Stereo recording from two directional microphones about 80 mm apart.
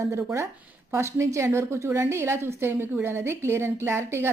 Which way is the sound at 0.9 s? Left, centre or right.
Right.